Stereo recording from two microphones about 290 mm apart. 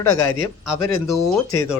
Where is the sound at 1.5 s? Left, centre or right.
Centre.